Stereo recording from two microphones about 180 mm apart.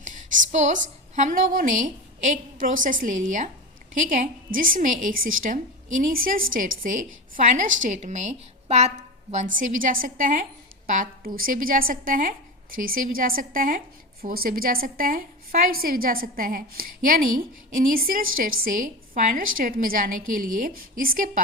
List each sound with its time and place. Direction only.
0.0 s a woman's voice: 40° right (ahead or behind)